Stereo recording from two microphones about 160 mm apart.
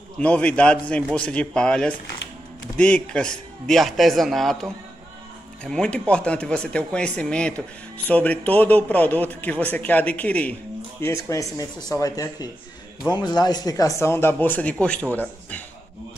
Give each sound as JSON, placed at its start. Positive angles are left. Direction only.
{"t": 0.2, "sound": "a man's voice", "side_deg": 10}